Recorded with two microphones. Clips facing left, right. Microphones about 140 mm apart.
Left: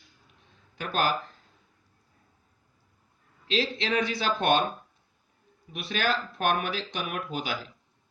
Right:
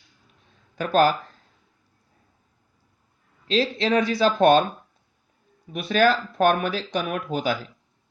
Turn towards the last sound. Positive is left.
turn(degrees=-40)  # may be behind; listen again after turning